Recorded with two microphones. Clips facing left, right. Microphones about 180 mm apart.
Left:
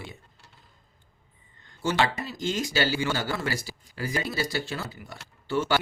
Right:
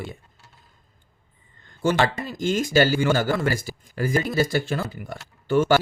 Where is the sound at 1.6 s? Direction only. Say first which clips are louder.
Right 4 dB; 50° right (ahead or behind).